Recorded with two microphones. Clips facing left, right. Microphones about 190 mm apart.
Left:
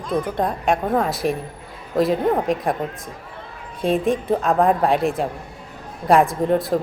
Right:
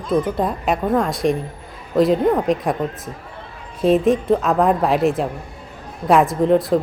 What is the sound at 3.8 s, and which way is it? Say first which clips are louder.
A woman's voice: right 4 dB; centre (ahead or behind).